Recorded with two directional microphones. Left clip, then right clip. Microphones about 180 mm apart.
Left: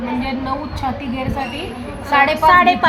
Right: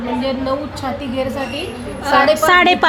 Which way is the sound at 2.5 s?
70° right (ahead or behind).